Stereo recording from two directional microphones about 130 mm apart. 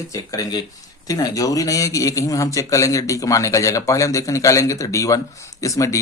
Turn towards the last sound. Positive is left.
turn(degrees=25)  # may be behind; listen again after turning